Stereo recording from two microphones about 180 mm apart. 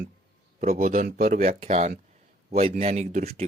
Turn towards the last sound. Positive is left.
turn(degrees=-40)  # may be behind; listen again after turning